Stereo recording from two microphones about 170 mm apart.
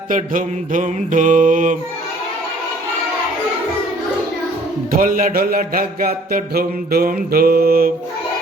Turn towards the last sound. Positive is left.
turn(degrees=-60)  # may be behind; listen again after turning